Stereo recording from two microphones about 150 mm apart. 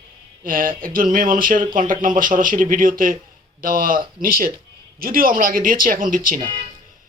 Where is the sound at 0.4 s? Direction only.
70° right (ahead or behind).